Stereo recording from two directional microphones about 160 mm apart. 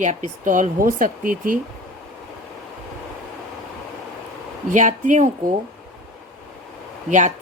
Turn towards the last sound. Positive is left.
turn(degrees=-50)  # may be behind; listen again after turning